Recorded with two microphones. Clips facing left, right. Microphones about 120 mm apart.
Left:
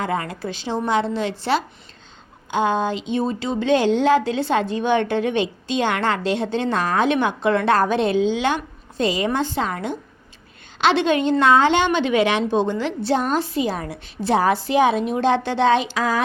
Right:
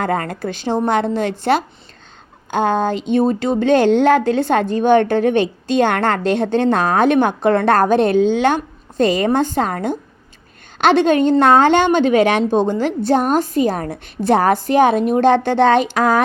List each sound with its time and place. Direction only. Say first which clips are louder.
0.0 s a woman's voice: right 4 dB; 50° right (ahead or behind)